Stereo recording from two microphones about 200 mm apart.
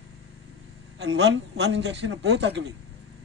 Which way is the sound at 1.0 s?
65° right (ahead or behind).